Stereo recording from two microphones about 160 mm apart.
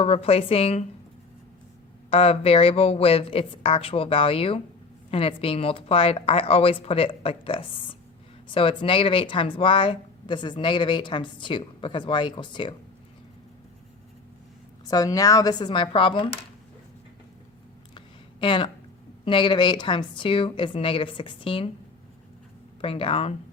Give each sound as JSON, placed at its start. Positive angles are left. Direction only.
{"t": 0.0, "sound": "speech", "side_deg": 40}
{"t": 2.0, "sound": "speech", "side_deg": 40}
{"t": 14.8, "sound": "speech", "side_deg": 25}
{"t": 17.9, "sound": "a sound", "side_deg": 30}
{"t": 19.2, "sound": "speech", "side_deg": 30}
{"t": 22.8, "sound": "speech", "side_deg": 35}